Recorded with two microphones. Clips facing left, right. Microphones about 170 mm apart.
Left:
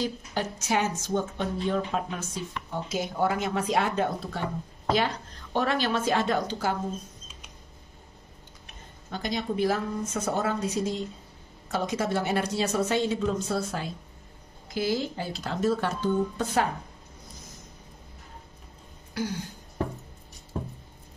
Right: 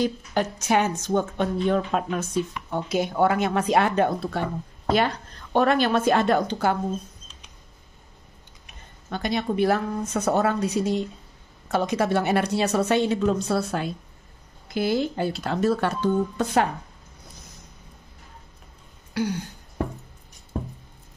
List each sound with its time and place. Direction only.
0.0 s a woman's voice: 60° right (ahead or behind)
9.1 s a woman's voice: 65° right (ahead or behind)